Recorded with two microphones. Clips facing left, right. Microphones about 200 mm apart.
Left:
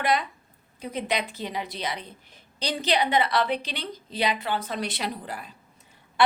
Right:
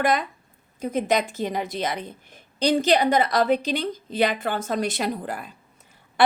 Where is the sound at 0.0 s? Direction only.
45° right (ahead or behind).